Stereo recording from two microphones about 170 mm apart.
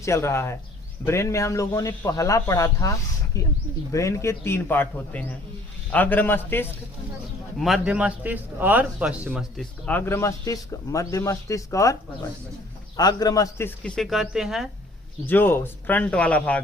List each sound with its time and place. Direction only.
0.0 s a man's voice: 15° left (ahead or behind)
7.6 s a man's voice: 5° right (ahead or behind)
9.8 s a man's voice: 10° left (ahead or behind)
13.0 s a man's voice: 20° left (ahead or behind); by 14.7 s 5° right (ahead or behind)
15.3 s a man's voice: 10° left (ahead or behind)